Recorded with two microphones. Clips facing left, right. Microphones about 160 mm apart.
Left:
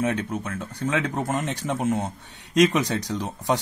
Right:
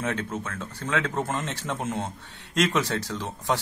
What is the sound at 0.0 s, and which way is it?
A man's voice, 15° left (ahead or behind).